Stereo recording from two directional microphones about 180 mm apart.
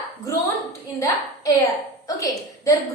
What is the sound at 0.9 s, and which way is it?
A woman's voice, 15° left (ahead or behind).